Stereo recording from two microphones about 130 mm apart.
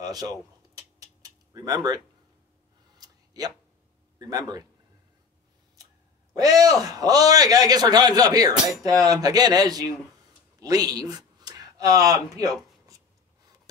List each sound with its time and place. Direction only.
0.0 s cutlery: 30° right (ahead or behind)
1.5 s speech: 30° right (ahead or behind)
3.0 s a sound: 30° right (ahead or behind)
4.2 s a man's voice: 30° right (ahead or behind)
6.3 s a man's voice: 25° right (ahead or behind)